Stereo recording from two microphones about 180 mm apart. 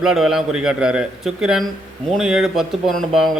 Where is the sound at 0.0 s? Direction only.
Centre (ahead or behind).